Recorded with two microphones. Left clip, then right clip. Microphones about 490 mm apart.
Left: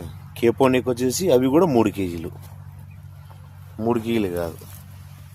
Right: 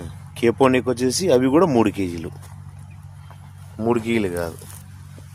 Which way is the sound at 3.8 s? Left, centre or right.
Left.